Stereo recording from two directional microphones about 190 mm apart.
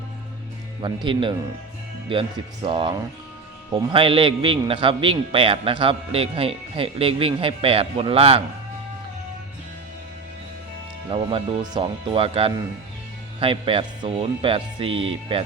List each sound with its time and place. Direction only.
0.8 s a man's voice: 25° right (ahead or behind)
11.1 s a man's voice: 30° right (ahead or behind)